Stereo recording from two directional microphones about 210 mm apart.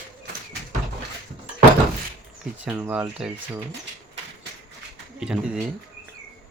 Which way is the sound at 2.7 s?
5° right (ahead or behind).